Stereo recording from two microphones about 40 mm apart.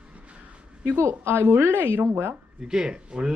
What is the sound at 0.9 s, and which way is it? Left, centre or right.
A woman's voice, right.